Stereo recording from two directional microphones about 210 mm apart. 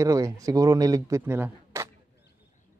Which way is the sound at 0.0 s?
15° right (ahead or behind).